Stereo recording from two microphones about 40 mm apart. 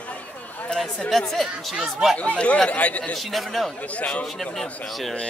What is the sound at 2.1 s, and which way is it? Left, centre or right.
Speech, left.